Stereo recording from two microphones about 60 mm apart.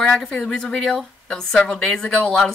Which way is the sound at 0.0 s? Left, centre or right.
Centre.